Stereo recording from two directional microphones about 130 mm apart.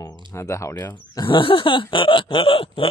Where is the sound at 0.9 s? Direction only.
35° left (ahead or behind).